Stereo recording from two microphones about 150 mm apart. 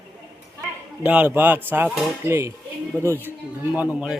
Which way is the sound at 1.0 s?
10° right (ahead or behind).